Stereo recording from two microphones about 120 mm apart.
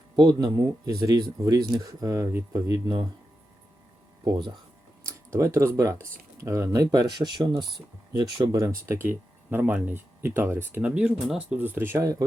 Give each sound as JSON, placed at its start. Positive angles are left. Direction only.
{"t": 0.2, "sound": "speech", "side_deg": -30}
{"t": 2.7, "sound": "speech", "side_deg": -35}
{"t": 4.2, "sound": "speech", "side_deg": -40}
{"t": 5.0, "sound": "speech", "side_deg": -25}